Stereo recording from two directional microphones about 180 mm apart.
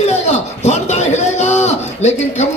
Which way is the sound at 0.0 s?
40° left (ahead or behind).